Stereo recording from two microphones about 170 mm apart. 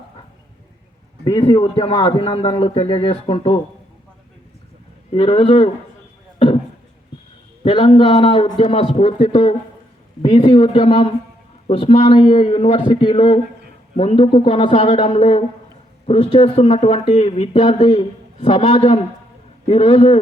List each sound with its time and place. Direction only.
1.2 s speech: 30° left (ahead or behind)
5.1 s speech: 35° left (ahead or behind)
7.6 s speech: 30° left (ahead or behind)